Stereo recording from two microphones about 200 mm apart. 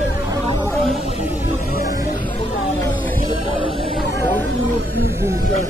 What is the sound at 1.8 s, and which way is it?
Music, 50° left (ahead or behind).